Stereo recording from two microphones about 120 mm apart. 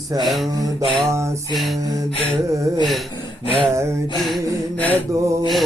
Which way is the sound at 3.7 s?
25° right (ahead or behind).